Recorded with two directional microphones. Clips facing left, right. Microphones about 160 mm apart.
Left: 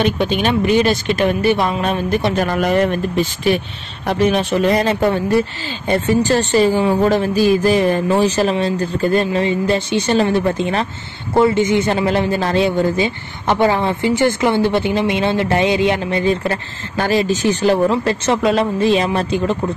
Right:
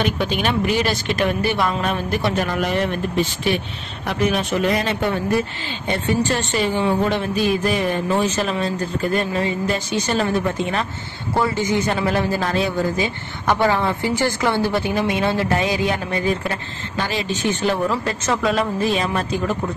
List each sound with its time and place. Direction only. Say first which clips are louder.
0.2 s a woman's voice: left 4 dB; 20° left (ahead or behind)
2.4 s speech: left 5 dB; 45° left (ahead or behind)
4.1 s a woman's voice: left 5 dB; 30° left (ahead or behind)
11.3 s a woman's voice: left 7 dB; 25° left (ahead or behind)
16.9 s a woman's voice: left 8 dB; 45° left (ahead or behind); by 19.5 s 30° left (ahead or behind)